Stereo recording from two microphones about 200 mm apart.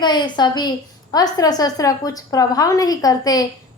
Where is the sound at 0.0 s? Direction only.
20° left (ahead or behind).